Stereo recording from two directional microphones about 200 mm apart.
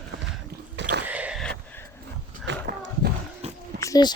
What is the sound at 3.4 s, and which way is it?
Roaring cats, 30° right (ahead or behind).